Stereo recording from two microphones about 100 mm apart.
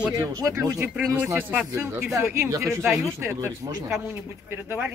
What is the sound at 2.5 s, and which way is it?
Speech, 30° right (ahead or behind).